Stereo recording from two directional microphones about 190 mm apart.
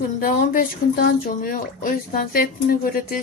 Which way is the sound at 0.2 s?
45° left (ahead or behind).